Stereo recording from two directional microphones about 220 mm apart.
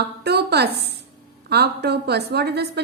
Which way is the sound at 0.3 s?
50° right (ahead or behind).